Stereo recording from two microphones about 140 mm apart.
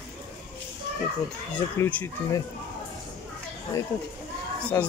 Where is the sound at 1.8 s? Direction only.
15° left (ahead or behind).